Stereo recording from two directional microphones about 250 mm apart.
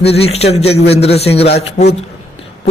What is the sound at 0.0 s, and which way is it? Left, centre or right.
A man's voice, left.